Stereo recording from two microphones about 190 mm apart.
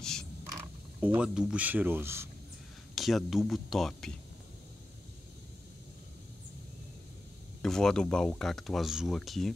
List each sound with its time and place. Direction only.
0.0 s a sound: 5° left (ahead or behind)
1.0 s speech: 5° right (ahead or behind)
2.9 s speech: centre (ahead or behind)
7.6 s speech: 5° left (ahead or behind)